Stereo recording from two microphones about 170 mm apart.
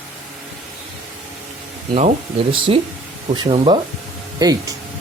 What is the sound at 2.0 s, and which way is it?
Speech, 35° right (ahead or behind).